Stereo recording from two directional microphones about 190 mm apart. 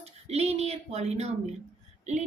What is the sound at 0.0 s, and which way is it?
Speech, 35° right (ahead or behind).